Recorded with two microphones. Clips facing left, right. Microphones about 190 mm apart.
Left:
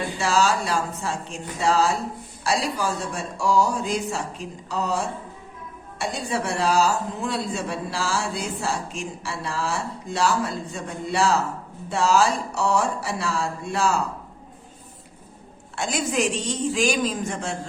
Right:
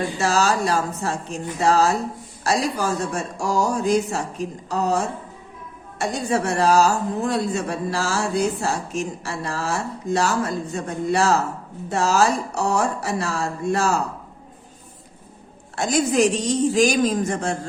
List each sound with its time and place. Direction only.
0.2 s a woman's voice: 40° right (ahead or behind)
15.7 s a woman's voice: 40° right (ahead or behind)